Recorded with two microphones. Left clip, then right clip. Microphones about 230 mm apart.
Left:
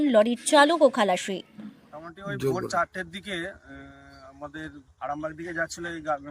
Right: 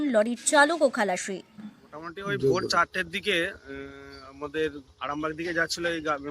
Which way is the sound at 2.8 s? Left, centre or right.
Centre.